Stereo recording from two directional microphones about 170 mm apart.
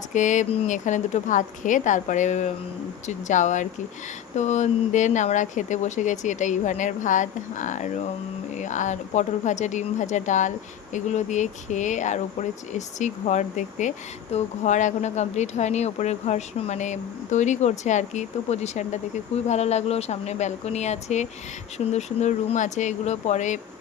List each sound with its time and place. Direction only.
0.1 s speech: 45° left (ahead or behind)